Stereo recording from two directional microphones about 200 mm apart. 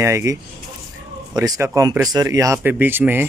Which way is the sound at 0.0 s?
15° right (ahead or behind).